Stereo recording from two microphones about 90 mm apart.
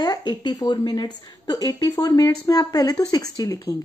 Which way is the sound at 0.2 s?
60° left (ahead or behind).